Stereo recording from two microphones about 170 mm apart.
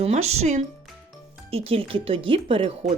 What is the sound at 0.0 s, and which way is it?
Speech, 40° right (ahead or behind).